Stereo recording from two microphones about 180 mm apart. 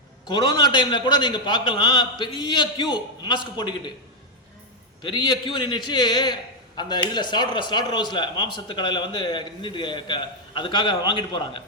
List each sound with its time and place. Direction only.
0.3 s speech: 25° left (ahead or behind)
5.0 s speech: 25° left (ahead or behind)